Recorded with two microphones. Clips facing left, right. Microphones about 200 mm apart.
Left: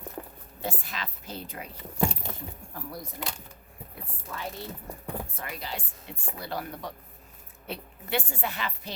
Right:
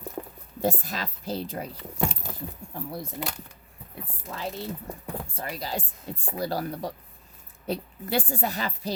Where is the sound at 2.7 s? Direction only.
25° right (ahead or behind).